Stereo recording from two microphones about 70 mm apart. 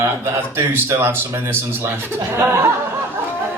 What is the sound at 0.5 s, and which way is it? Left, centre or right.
Speech, right.